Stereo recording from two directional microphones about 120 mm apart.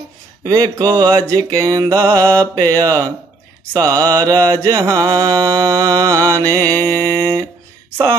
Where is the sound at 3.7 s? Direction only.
25° right (ahead or behind).